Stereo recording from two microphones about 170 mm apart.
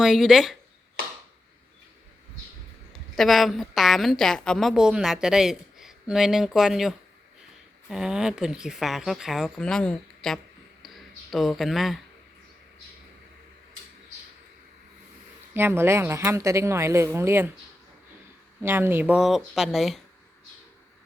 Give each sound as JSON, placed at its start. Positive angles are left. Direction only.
{"t": 0.0, "sound": "a woman's voice", "side_deg": 0}
{"t": 3.2, "sound": "a woman's voice", "side_deg": 0}
{"t": 10.8, "sound": "a sound", "side_deg": 0}
{"t": 15.5, "sound": "speech", "side_deg": -15}
{"t": 18.6, "sound": "a woman's voice", "side_deg": -15}